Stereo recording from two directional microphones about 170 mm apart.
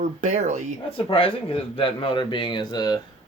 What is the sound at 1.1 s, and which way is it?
Speech, 30° left (ahead or behind).